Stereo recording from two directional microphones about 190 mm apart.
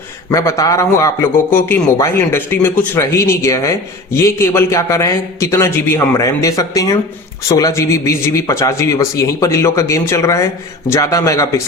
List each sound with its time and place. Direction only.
0.3 s a man's voice: 15° left (ahead or behind)